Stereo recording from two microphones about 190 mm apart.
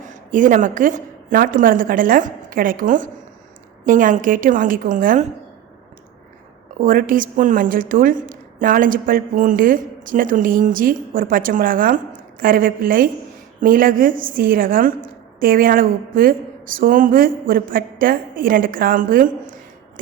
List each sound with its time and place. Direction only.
0.3 s a woman's voice: 45° right (ahead or behind)
6.7 s a woman's voice: 45° right (ahead or behind)